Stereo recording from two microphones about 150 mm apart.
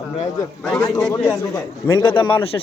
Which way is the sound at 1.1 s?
15° left (ahead or behind).